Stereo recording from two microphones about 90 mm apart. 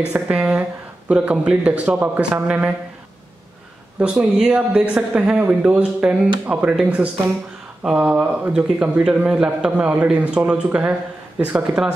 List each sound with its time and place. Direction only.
0.1 s speech: 10° right (ahead or behind)
4.0 s speech: 10° right (ahead or behind)